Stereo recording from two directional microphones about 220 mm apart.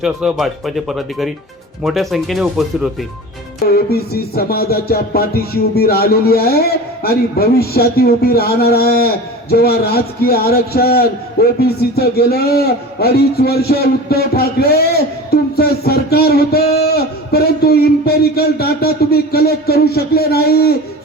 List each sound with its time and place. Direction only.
0.0 s speech: 5° right (ahead or behind)
3.7 s a man's voice: 45° left (ahead or behind)